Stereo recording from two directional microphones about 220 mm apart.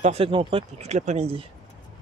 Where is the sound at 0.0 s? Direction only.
25° right (ahead or behind).